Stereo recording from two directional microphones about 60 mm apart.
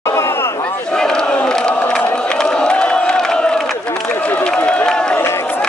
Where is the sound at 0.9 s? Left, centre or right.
Centre.